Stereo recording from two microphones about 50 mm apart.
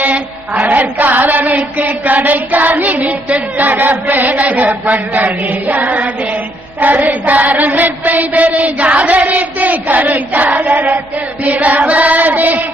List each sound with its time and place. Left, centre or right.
0.6 s chant: right